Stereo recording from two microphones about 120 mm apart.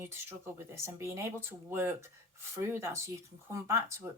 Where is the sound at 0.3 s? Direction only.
20° right (ahead or behind).